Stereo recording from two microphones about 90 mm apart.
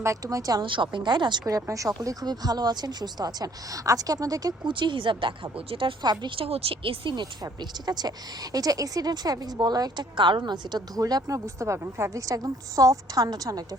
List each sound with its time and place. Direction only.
0.0 s a woman's voice: 40° right (ahead or behind)
0.6 s speech: 65° right (ahead or behind)
1.6 s a woman's voice: 35° right (ahead or behind)
4.7 s speech: 65° right (ahead or behind)
6.0 s a woman's voice: 55° right (ahead or behind)
6.3 s speech: 90° right; by 7.3 s 65° right (ahead or behind)
7.4 s a woman's voice: 50° right (ahead or behind)